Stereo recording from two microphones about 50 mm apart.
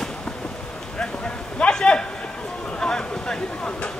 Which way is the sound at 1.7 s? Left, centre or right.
Centre.